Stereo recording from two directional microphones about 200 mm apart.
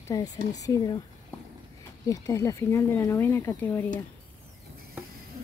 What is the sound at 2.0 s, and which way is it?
Speech, 15° left (ahead or behind).